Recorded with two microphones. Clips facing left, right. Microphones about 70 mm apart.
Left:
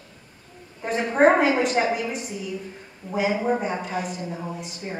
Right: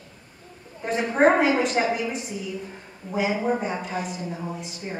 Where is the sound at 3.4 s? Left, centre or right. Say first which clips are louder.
Left 1 dB; centre.